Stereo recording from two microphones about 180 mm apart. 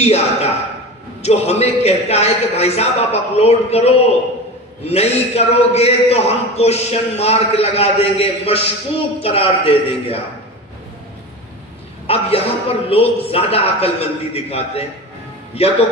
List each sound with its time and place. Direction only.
0.0 s a man's voice: 35° left (ahead or behind)
12.1 s a man's voice: 35° left (ahead or behind)